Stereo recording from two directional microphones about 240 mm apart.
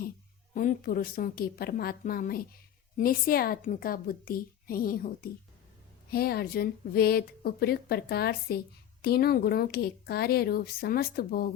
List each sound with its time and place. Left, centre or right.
0.5 s speech: left